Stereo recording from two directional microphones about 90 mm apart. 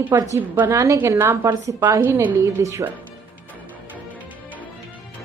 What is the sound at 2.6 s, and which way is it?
Speech, 30° right (ahead or behind).